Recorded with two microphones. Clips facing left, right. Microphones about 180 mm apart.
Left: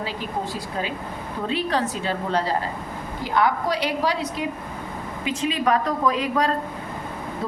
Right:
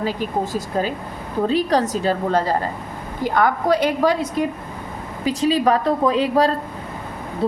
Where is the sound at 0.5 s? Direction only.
40° right (ahead or behind).